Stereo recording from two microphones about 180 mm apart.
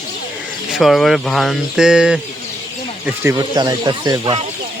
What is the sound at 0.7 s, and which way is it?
Speech, centre (ahead or behind).